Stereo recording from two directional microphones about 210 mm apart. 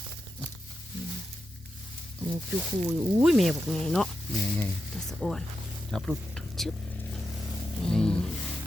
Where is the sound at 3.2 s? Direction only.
Centre (ahead or behind).